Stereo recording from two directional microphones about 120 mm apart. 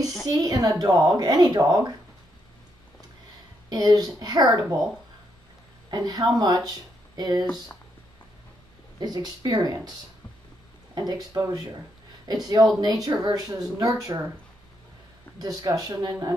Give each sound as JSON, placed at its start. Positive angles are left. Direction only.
{"t": 0.0, "sound": "a woman's voice", "side_deg": -5}
{"t": 0.4, "sound": "speech", "side_deg": -30}
{"t": 3.7, "sound": "speech", "side_deg": -35}
{"t": 5.9, "sound": "speech", "side_deg": -35}
{"t": 9.0, "sound": "speech", "side_deg": -35}
{"t": 11.0, "sound": "speech", "side_deg": -35}
{"t": 12.8, "sound": "speech", "side_deg": -30}
{"t": 15.3, "sound": "speech", "side_deg": -30}